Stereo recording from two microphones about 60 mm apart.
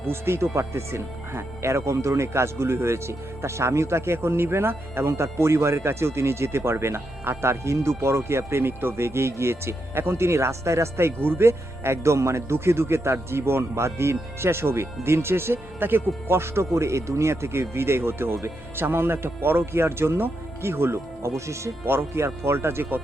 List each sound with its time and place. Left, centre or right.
0.1 s speech: right
21.8 s speech: right